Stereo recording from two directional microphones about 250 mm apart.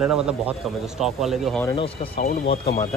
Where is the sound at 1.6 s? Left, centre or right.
Centre.